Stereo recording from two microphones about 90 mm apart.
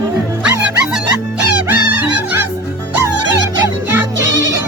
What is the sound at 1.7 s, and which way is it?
Music, 20° right (ahead or behind).